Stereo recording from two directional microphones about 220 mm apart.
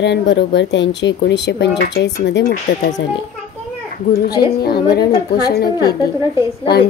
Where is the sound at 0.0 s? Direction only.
50° left (ahead or behind).